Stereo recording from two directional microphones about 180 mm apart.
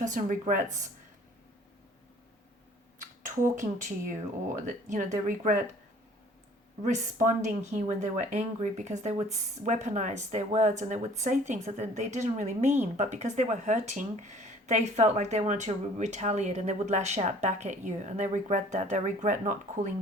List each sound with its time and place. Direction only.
0.0 s speech: 45° right (ahead or behind)
3.6 s speech: 45° right (ahead or behind)
6.8 s speech: 45° right (ahead or behind)